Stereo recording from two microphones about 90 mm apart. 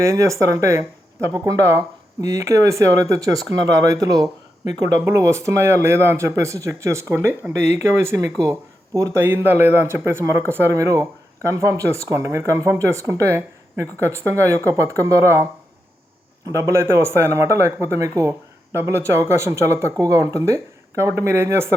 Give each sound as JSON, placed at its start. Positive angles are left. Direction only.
{"t": 0.0, "sound": "speech", "side_deg": -35}
{"t": 9.2, "sound": "a man's voice", "side_deg": -25}
{"t": 16.5, "sound": "a man's voice", "side_deg": -35}